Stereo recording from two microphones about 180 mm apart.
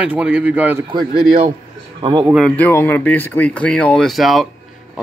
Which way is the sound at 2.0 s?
25° right (ahead or behind).